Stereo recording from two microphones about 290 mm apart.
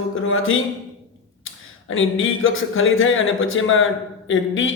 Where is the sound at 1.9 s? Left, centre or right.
Left.